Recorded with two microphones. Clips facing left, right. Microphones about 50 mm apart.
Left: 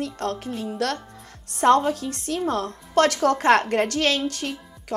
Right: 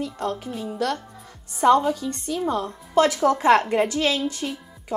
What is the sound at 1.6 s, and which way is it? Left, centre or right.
Speech, left.